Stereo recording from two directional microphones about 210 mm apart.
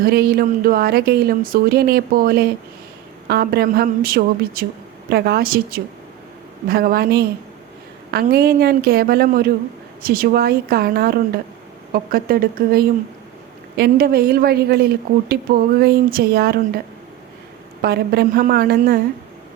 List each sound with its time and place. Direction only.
0.0 s speech: 45° right (ahead or behind)
17.8 s speech: 50° right (ahead or behind)